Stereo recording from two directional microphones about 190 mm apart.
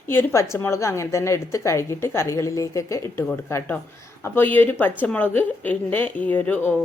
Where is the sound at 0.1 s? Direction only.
10° left (ahead or behind).